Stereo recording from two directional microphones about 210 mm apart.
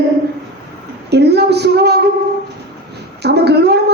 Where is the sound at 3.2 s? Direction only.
50° right (ahead or behind).